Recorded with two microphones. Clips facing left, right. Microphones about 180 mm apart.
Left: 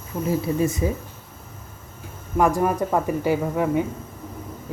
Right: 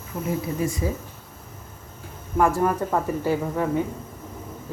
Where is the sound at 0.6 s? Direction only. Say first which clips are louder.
Left 3 dB; 20° left (ahead or behind).